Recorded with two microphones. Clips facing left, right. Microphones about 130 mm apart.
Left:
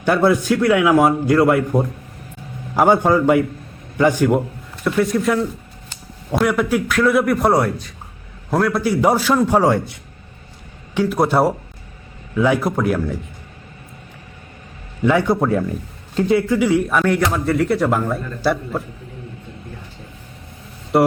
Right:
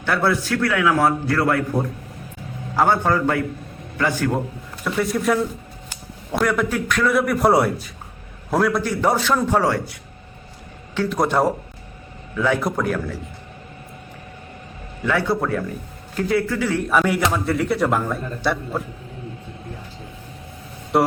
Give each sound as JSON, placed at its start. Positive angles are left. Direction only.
{"t": 0.0, "sound": "a man's voice", "side_deg": 15}
{"t": 2.7, "sound": "a man's voice", "side_deg": 15}
{"t": 4.8, "sound": "a man's voice", "side_deg": 0}
{"t": 9.6, "sound": "a man's voice", "side_deg": 25}
{"t": 10.9, "sound": "a man's voice", "side_deg": 10}
{"t": 15.0, "sound": "a man's voice", "side_deg": 20}
{"t": 16.9, "sound": "a man's voice", "side_deg": -5}
{"t": 20.9, "sound": "a man's voice", "side_deg": 0}